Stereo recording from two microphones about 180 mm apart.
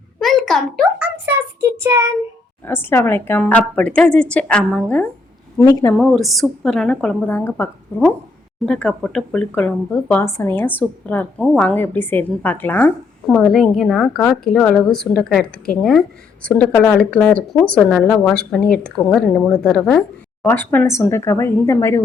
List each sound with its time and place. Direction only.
0.2 s a sound: centre (ahead or behind)
0.9 s a sound: 10° right (ahead or behind)
1.7 s child singing: 15° right (ahead or behind)
2.6 s speech: 15° left (ahead or behind)
5.5 s speech: 20° left (ahead or behind)
6.0 s a woman's voice: centre (ahead or behind)